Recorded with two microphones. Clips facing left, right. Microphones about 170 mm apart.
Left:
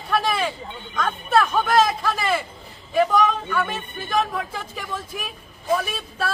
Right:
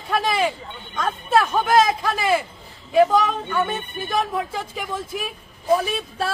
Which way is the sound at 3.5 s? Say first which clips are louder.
Right 2 dB; 25° right (ahead or behind).